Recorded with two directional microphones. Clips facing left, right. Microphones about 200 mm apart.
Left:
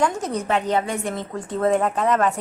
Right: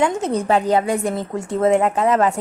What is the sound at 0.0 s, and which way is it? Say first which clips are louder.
A woman's voice: right 4 dB; 30° right (ahead or behind).